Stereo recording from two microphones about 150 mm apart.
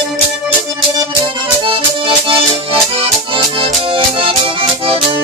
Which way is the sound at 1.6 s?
35° right (ahead or behind).